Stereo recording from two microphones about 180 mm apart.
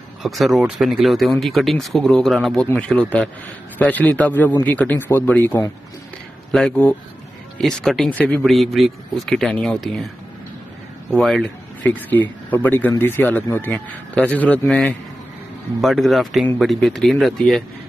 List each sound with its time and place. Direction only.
0.2 s speech: centre (ahead or behind)
11.1 s speech: centre (ahead or behind)